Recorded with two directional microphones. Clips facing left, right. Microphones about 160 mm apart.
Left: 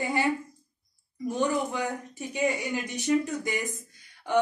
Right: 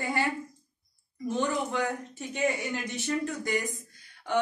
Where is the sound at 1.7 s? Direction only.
15° left (ahead or behind).